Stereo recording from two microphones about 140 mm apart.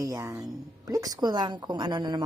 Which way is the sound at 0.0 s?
25° right (ahead or behind).